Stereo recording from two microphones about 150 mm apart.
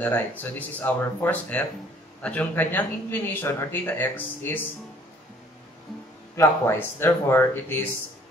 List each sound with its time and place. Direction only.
0.4 s speech: 10° left (ahead or behind)
6.3 s speech: 15° left (ahead or behind)